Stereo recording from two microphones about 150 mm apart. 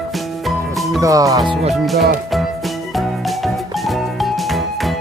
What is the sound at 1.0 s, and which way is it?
Speech, 20° right (ahead or behind).